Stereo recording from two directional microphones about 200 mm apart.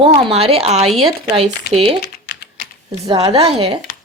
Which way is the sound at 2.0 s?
50° left (ahead or behind).